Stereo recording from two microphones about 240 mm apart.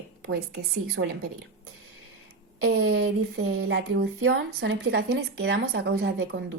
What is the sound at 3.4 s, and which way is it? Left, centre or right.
Speech, right.